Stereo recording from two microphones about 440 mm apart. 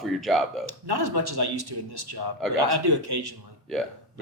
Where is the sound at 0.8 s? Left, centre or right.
Right.